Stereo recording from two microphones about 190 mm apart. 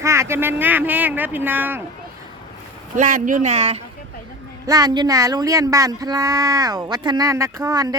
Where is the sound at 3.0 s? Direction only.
45° right (ahead or behind).